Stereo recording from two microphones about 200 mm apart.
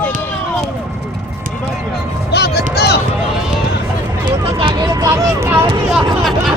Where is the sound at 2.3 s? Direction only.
55° left (ahead or behind).